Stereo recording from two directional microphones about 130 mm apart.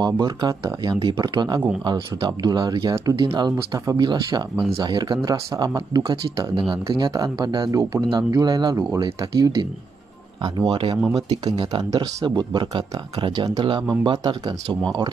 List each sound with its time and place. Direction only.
0.0 s speech: 30° right (ahead or behind)
10.7 s speech: 40° right (ahead or behind)